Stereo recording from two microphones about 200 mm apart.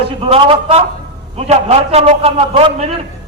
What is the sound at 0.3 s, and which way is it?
A man's voice, 30° right (ahead or behind).